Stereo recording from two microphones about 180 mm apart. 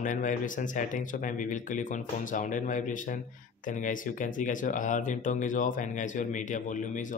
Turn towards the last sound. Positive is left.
turn(degrees=45)  # may be behind; listen again after turning